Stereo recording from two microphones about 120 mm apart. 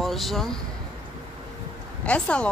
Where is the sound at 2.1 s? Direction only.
10° left (ahead or behind).